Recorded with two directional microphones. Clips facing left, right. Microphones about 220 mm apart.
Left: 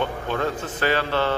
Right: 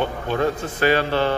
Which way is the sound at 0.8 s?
15° right (ahead or behind).